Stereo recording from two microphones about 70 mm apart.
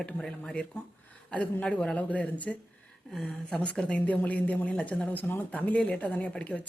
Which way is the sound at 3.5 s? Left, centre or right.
Centre.